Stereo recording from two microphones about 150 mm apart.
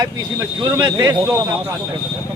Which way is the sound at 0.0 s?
25° right (ahead or behind).